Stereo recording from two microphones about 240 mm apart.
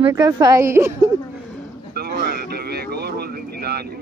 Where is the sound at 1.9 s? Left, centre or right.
Right.